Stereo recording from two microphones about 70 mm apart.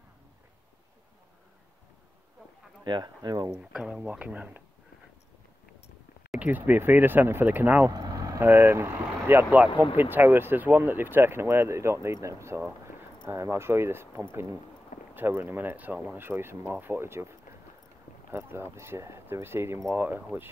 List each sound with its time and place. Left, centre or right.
2.8 s speech: right
3.5 s speech: centre
6.4 s speech: right
7.9 s vehicle: right
8.4 s speech: right
16.2 s speech: right